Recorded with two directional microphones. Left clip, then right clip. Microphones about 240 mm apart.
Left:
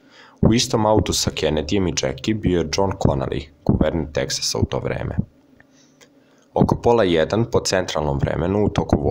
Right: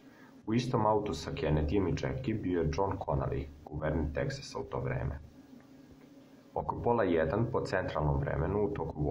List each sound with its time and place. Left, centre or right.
0.5 s speech: left
6.5 s speech: left